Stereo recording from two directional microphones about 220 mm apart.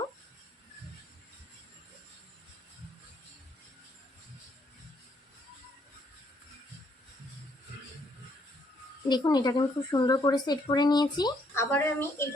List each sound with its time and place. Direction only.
9.0 s speech: 20° left (ahead or behind)